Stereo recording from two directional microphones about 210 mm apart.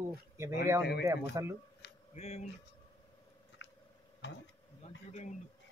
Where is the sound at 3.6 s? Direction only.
60° left (ahead or behind).